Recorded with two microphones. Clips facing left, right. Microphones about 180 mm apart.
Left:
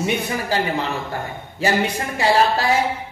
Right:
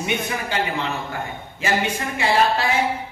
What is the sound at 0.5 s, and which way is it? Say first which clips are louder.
A man's voice: left 3 dB; 35° left (ahead or behind).